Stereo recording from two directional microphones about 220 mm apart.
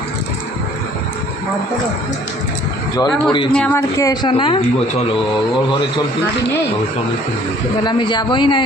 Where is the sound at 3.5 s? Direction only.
5° left (ahead or behind); by 4.7 s 25° left (ahead or behind).